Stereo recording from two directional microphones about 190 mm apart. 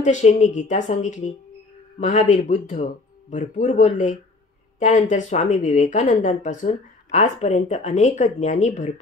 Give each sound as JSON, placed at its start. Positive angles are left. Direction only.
{"t": 0.0, "sound": "a woman's voice", "side_deg": 40}